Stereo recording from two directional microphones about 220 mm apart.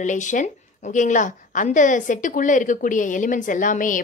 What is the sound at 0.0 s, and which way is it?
A woman's voice, 35° left (ahead or behind).